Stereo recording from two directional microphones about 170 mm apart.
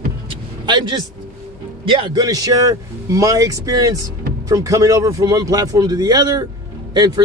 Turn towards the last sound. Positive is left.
turn(degrees=-25)  # may be behind; listen again after turning